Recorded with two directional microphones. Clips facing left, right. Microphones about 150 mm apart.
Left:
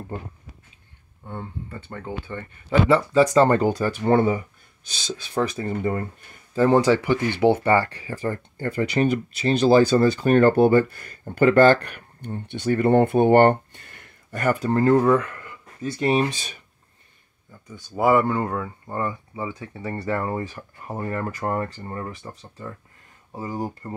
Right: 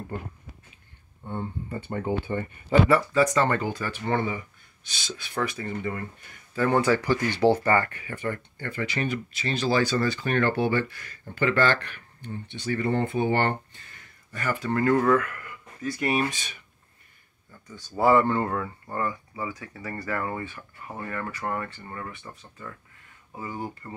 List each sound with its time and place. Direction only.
1.2 s speech: centre (ahead or behind)
1.9 s speech: 20° right (ahead or behind)
2.9 s speech: 25° left (ahead or behind)
6.5 s speech: 30° left (ahead or behind)
7.0 s speech: 15° left (ahead or behind); by 14.7 s 50° left (ahead or behind)
14.7 s speech: 30° left (ahead or behind)
15.0 s speech: 20° left (ahead or behind)
17.6 s speech: 15° left (ahead or behind); by 23.9 s 40° left (ahead or behind)